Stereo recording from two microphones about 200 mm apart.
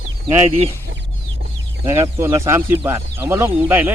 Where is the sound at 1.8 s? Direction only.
15° right (ahead or behind).